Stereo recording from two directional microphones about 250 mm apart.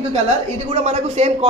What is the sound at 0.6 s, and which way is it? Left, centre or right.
Speech, right.